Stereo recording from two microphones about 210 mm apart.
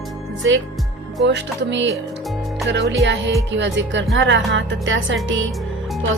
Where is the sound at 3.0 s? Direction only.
55° right (ahead or behind).